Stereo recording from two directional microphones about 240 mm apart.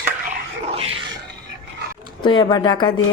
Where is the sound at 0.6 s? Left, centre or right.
Right.